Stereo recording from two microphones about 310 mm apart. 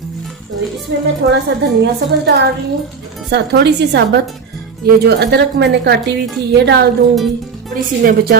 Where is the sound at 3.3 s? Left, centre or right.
Right.